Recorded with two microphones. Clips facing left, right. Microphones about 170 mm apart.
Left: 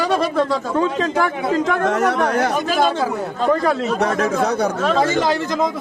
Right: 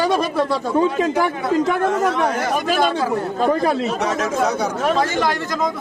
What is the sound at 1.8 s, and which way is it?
Speech, 70° left (ahead or behind).